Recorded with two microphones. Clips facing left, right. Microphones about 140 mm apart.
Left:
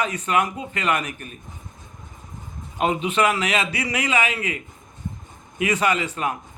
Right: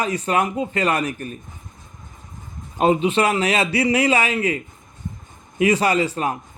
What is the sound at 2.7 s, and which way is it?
Speech, 30° right (ahead or behind).